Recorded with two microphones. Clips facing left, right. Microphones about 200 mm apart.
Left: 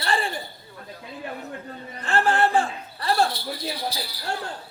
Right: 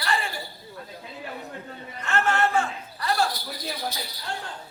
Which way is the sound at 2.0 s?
30° left (ahead or behind).